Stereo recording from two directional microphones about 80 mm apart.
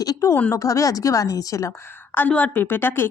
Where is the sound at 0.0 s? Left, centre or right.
Left.